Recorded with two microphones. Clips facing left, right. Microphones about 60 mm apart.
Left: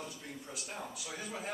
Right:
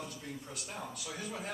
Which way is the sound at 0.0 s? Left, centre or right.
Centre.